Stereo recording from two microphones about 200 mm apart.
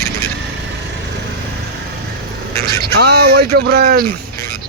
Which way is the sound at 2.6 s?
55° right (ahead or behind).